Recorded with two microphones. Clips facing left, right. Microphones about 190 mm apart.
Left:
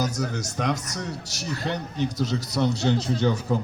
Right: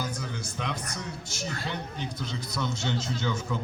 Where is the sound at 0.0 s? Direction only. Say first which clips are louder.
Left 7 dB; 40° left (ahead or behind).